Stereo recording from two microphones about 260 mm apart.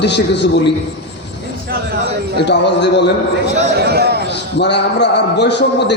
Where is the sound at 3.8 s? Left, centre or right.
Right.